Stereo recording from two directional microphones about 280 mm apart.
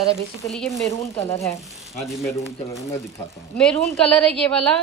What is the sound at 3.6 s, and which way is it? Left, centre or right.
A woman's voice, centre.